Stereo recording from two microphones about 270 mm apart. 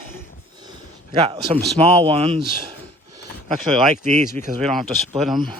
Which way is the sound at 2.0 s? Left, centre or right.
Right.